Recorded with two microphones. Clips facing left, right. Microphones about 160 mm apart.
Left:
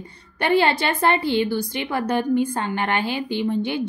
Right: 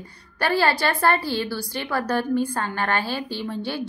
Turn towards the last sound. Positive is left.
turn(degrees=20)  # may be behind; listen again after turning